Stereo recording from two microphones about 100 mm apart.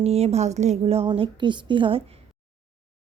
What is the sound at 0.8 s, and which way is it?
A woman's voice, 75° right (ahead or behind).